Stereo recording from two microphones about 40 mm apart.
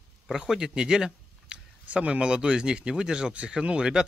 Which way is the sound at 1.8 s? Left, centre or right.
Right.